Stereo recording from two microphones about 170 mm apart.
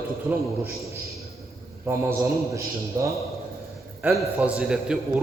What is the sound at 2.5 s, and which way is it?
Speech, 20° right (ahead or behind).